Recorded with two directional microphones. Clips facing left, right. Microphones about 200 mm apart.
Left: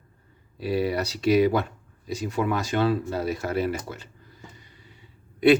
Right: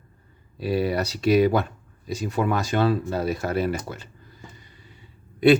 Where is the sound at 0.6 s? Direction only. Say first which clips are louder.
Right 1 dB; 40° right (ahead or behind).